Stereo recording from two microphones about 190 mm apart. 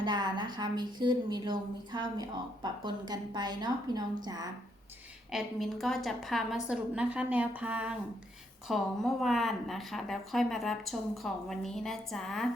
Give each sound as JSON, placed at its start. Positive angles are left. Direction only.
{"t": 0.0, "sound": "a woman's voice", "side_deg": -25}
{"t": 5.3, "sound": "a woman's voice", "side_deg": 0}